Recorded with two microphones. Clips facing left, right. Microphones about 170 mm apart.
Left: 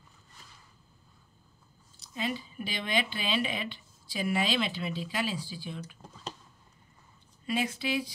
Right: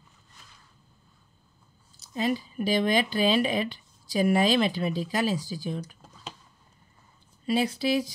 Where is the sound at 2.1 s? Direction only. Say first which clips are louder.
Right 7 dB; 40° right (ahead or behind).